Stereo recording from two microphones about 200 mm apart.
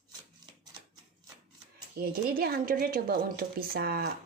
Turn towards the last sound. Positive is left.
turn(degrees=-50)  # may be behind; listen again after turning